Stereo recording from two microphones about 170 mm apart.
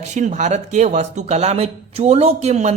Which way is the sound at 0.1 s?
45° right (ahead or behind).